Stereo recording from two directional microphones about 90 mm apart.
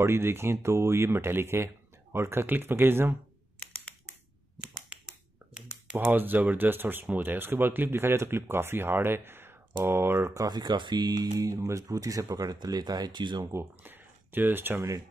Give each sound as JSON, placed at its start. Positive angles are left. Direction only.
{"t": 0.0, "sound": "speech", "side_deg": -30}
{"t": 5.5, "sound": "speech", "side_deg": -15}
{"t": 13.4, "sound": "speech", "side_deg": -30}